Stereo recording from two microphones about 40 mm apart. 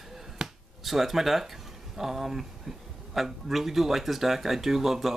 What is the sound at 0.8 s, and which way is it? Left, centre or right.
Speech, centre.